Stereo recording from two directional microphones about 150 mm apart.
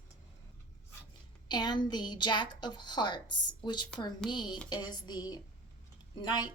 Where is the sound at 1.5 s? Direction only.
30° left (ahead or behind).